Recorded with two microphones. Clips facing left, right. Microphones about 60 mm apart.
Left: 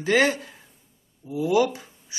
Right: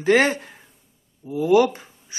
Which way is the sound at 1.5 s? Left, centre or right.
Right.